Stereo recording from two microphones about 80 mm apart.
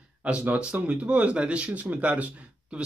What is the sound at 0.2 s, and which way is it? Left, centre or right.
Speech, centre.